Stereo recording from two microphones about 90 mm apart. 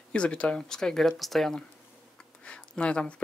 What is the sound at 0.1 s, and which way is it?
Speech, 10° left (ahead or behind).